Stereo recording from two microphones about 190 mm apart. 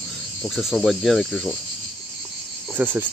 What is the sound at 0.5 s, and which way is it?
Speech, centre (ahead or behind).